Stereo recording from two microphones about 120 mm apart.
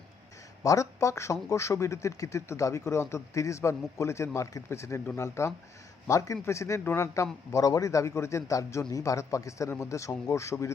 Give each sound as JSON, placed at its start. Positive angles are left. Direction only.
{"t": 0.6, "sound": "speech", "side_deg": 25}